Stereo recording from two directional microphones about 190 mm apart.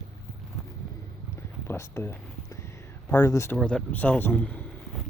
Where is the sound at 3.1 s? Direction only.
15° left (ahead or behind).